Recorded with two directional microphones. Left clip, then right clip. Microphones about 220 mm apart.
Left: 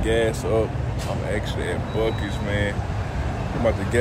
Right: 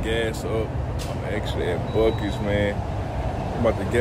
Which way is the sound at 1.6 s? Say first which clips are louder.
Right 5 dB; 30° right (ahead or behind).